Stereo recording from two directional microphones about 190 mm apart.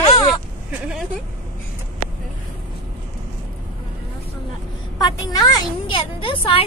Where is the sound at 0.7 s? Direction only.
5° right (ahead or behind).